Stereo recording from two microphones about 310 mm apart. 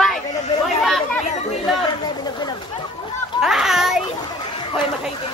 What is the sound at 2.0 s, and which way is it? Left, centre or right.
Speech, centre.